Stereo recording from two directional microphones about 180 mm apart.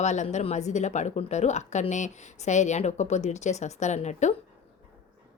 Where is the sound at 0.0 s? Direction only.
40° left (ahead or behind).